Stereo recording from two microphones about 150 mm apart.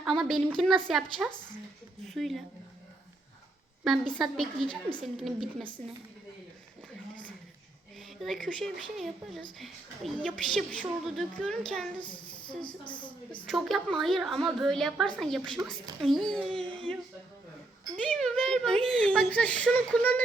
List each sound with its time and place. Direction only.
0.0 s a woman's voice: centre (ahead or behind)
1.3 s speech: 30° left (ahead or behind)
2.0 s a child's voice: centre (ahead or behind)
3.8 s a child's voice: centre (ahead or behind)
7.9 s a sound: centre (ahead or behind)
8.4 s a child's voice: centre (ahead or behind)
11.9 s speech: 35° left (ahead or behind)
13.4 s a child's voice: centre (ahead or behind)
15.6 s a woman's voice: 15° right (ahead or behind)
16.0 s a child's voice: centre (ahead or behind)
18.2 s a child's voice: 5° left (ahead or behind)